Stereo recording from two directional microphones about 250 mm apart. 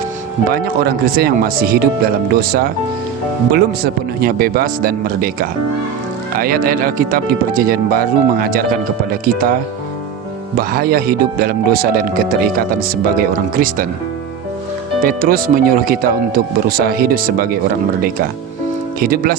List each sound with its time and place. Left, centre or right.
0.5 s speech: right
4.2 s speech: right
10.6 s speech: right
15.0 s speech: right
18.9 s speech: right